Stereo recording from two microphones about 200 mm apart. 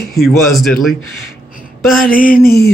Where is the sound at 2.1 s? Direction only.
45° left (ahead or behind).